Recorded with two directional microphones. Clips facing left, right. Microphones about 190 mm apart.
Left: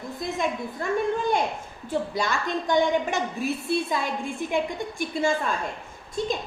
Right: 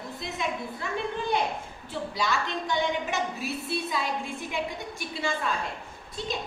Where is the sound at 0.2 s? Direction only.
45° left (ahead or behind).